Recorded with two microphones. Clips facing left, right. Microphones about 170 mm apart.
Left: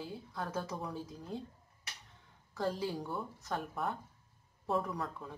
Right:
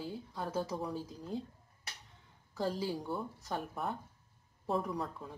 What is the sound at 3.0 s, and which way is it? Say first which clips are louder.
Speech: right 1 dB; 15° right (ahead or behind).